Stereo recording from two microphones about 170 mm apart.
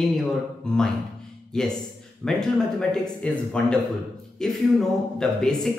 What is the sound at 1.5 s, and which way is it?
Speech, 5° left (ahead or behind).